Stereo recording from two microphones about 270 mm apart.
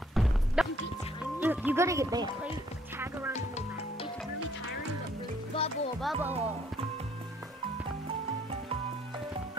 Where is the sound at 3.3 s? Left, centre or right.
Left.